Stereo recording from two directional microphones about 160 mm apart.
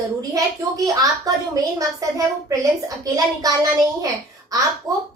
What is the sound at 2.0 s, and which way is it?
A child's voice, 20° right (ahead or behind).